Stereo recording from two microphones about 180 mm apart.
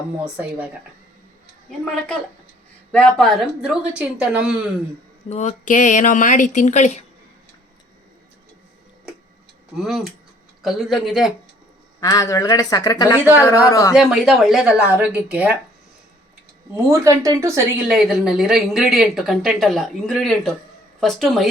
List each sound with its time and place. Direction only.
0.3 s speech: 5° right (ahead or behind)
1.8 s a woman's voice: 5° left (ahead or behind)
5.3 s speech: 40° left (ahead or behind)
9.7 s a woman's voice: 5° right (ahead or behind)
11.9 s speech: 20° left (ahead or behind)
13.9 s a woman's voice: centre (ahead or behind)
16.7 s speech: 15° right (ahead or behind)
17.8 s a woman's voice: centre (ahead or behind)